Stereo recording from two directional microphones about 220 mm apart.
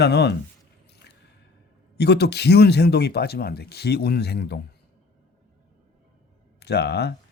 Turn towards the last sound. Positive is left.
turn(degrees=50)  # may be behind; listen again after turning